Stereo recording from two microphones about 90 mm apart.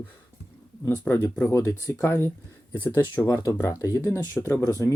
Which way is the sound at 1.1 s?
20° left (ahead or behind).